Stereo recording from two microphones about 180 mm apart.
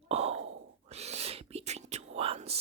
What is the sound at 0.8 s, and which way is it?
Speech, 35° right (ahead or behind).